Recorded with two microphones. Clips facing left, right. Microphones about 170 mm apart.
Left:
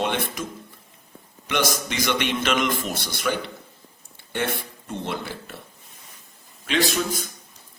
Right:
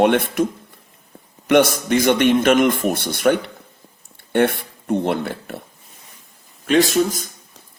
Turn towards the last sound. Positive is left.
turn(degrees=-45)  # may be behind; listen again after turning